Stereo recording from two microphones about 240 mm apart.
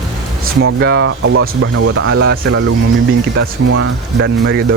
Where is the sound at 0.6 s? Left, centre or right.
Right.